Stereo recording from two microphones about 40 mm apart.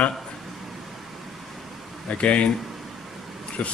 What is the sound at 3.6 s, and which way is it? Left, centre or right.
Speech, left.